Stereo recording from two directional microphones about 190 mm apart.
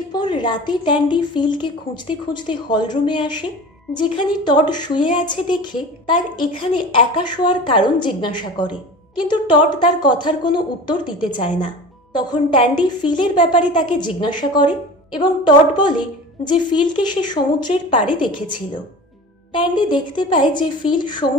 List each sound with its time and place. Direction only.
0.1 s a woman's voice: 25° left (ahead or behind)
19.5 s a woman's voice: 25° left (ahead or behind)